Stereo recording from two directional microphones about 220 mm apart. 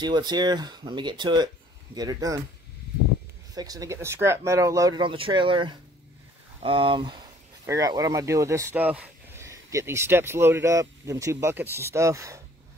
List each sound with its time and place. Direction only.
0.0 s speech: 20° right (ahead or behind)
3.5 s speech: 15° right (ahead or behind)